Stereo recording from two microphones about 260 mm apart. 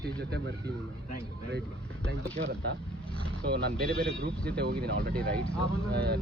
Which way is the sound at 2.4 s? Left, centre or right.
Right.